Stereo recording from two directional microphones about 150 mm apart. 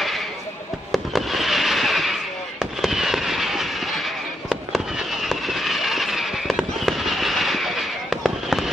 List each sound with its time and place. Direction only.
0.9 s fireworks: centre (ahead or behind)